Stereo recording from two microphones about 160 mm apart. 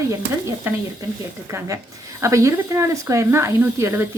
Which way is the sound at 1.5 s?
20° right (ahead or behind).